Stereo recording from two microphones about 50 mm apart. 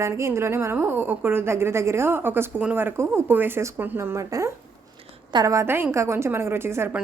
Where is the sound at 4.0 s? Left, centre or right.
Right.